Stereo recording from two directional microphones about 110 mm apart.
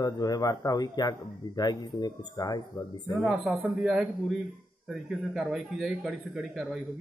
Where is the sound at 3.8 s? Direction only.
5° right (ahead or behind).